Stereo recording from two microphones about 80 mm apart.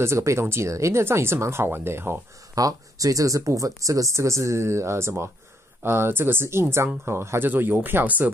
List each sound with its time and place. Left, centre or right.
0.0 s speech: right
2.5 s speech: right